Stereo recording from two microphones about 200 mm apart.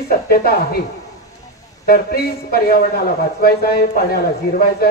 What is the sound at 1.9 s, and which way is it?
A woman's voice, 50° left (ahead or behind).